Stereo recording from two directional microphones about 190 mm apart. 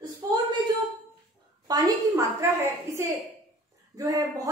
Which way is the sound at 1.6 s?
20° right (ahead or behind).